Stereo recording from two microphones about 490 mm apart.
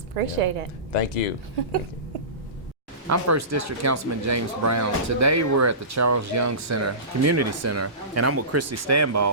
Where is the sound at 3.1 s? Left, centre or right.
Right.